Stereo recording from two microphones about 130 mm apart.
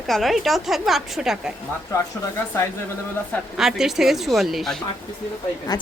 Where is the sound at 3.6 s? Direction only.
5° right (ahead or behind).